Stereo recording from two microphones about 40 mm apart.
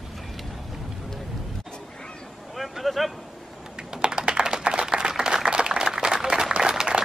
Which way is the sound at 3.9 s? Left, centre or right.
Right.